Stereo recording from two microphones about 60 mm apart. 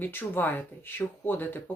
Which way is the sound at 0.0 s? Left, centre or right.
Left.